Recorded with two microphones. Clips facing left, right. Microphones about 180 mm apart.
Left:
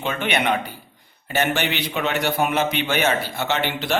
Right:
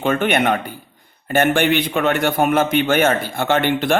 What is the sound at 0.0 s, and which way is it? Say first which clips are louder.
A man's voice: right 6 dB; 50° right (ahead or behind).